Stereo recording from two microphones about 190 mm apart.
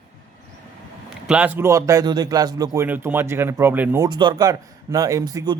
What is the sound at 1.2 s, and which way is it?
Speech, 10° right (ahead or behind).